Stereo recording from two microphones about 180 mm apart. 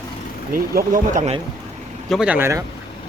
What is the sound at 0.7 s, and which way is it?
Speech, 45° right (ahead or behind).